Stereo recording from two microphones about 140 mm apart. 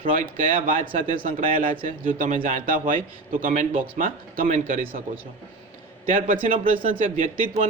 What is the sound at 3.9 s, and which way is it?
Speech, 75° right (ahead or behind).